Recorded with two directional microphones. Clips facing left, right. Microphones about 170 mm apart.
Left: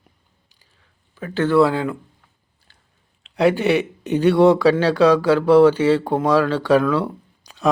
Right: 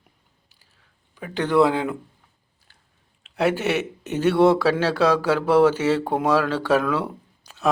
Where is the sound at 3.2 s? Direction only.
5° right (ahead or behind).